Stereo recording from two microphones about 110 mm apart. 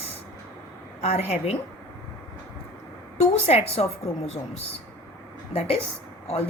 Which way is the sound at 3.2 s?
65° left (ahead or behind).